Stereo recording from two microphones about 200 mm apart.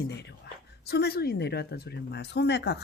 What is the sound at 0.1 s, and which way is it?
Speech, 55° left (ahead or behind).